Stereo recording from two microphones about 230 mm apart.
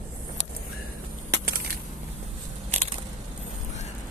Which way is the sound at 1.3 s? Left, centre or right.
Right.